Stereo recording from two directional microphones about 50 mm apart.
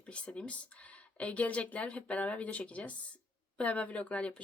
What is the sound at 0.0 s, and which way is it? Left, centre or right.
Speech, left.